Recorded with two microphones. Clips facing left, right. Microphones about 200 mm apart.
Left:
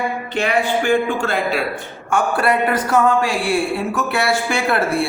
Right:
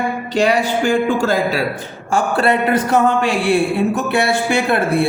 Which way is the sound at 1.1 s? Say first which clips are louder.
Right 3 dB; 40° right (ahead or behind).